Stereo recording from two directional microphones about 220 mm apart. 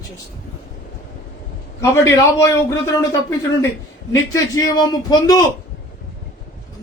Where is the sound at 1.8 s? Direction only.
15° left (ahead or behind).